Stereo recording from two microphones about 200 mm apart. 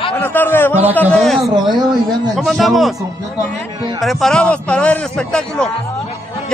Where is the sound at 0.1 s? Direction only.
10° left (ahead or behind).